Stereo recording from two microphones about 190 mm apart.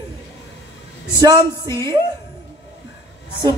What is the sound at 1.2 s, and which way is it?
Speech, 20° right (ahead or behind).